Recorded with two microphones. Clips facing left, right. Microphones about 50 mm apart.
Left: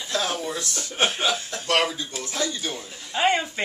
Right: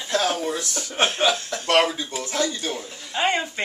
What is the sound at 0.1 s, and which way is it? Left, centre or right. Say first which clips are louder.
Speech: right 4 dB; right.